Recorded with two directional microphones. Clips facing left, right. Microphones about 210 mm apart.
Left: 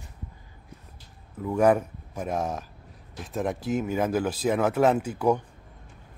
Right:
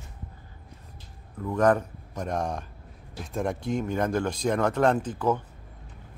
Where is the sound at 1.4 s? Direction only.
10° left (ahead or behind).